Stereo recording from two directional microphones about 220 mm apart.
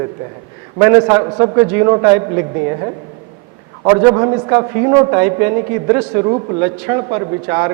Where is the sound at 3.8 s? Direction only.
20° right (ahead or behind).